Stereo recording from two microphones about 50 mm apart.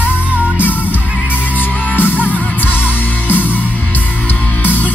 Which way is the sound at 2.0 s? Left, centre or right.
Left.